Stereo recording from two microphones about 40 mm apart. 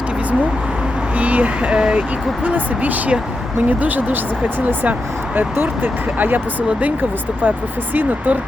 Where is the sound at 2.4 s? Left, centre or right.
Right.